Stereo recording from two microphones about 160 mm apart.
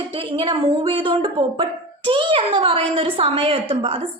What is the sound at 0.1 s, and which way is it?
A woman's voice, 30° right (ahead or behind).